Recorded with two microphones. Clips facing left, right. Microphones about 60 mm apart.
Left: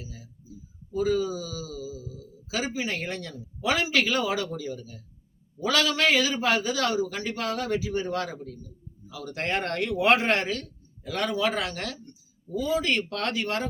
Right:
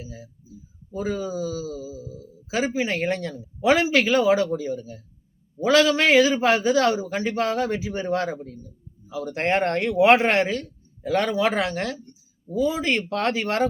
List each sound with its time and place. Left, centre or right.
0.0 s a man's voice: right